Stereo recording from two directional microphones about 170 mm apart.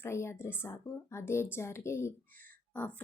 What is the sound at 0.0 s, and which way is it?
Speech, 15° left (ahead or behind).